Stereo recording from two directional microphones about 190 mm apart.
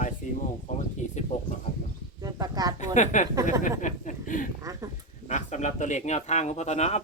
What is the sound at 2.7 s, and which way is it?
Speech, 40° left (ahead or behind).